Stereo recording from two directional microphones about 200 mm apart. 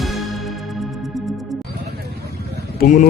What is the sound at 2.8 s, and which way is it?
Speech, 40° left (ahead or behind).